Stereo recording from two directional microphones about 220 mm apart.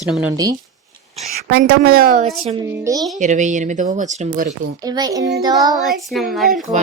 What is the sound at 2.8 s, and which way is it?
Speech, 15° right (ahead or behind).